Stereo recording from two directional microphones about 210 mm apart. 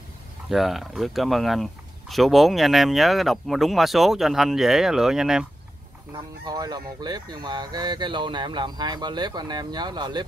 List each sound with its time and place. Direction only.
0.5 s speech: centre (ahead or behind)
6.1 s speech: 20° right (ahead or behind)